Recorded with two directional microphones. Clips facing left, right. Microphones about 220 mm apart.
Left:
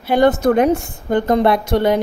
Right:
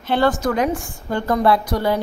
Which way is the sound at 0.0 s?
15° left (ahead or behind).